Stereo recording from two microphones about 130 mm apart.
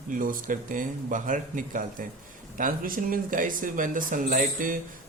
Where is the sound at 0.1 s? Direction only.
90° right.